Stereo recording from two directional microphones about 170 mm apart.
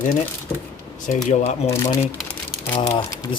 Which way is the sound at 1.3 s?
40° left (ahead or behind).